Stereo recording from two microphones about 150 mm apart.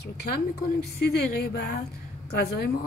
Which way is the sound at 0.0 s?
90° left.